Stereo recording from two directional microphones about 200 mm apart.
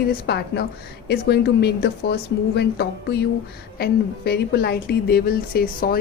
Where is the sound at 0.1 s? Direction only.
55° left (ahead or behind).